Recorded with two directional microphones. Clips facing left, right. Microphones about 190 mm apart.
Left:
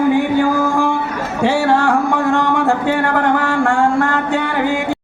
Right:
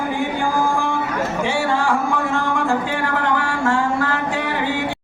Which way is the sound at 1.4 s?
70° left (ahead or behind).